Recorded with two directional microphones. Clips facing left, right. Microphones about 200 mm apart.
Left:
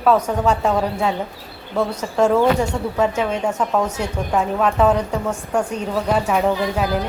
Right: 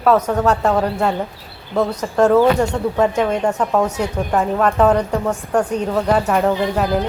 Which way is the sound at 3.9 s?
5° right (ahead or behind).